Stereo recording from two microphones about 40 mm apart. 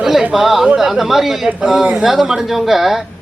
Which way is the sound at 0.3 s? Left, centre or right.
Centre.